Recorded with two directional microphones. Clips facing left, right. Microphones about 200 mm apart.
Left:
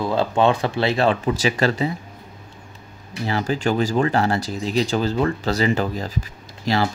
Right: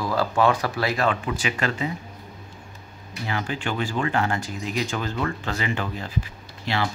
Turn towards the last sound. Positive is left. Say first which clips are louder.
# left 6 dB
turn(degrees=40)  # may be behind; listen again after turning